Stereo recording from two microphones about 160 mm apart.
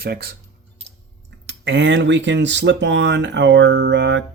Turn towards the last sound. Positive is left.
turn(degrees=-90)